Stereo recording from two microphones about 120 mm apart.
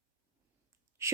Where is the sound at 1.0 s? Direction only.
20° right (ahead or behind).